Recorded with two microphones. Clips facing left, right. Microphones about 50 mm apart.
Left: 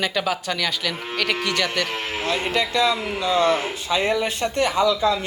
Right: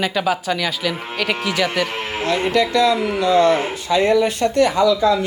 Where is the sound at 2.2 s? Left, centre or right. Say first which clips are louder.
Right 5 dB; right.